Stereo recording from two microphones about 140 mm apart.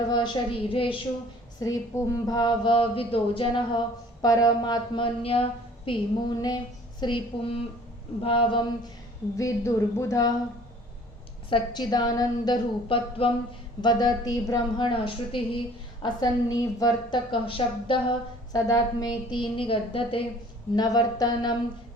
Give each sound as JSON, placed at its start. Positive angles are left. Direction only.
{"t": 0.1, "sound": "a woman's voice", "side_deg": 35}
{"t": 1.5, "sound": "a woman's voice", "side_deg": 25}
{"t": 5.2, "sound": "a woman's voice", "side_deg": 40}
{"t": 9.4, "sound": "a woman's voice", "side_deg": 20}
{"t": 11.4, "sound": "a woman's voice", "side_deg": 35}
{"t": 12.9, "sound": "a woman's voice", "side_deg": 40}
{"t": 13.8, "sound": "a woman's voice", "side_deg": 30}
{"t": 17.3, "sound": "a woman's voice", "side_deg": 40}
{"t": 18.5, "sound": "a woman's voice", "side_deg": 25}
{"t": 20.7, "sound": "a woman's voice", "side_deg": 25}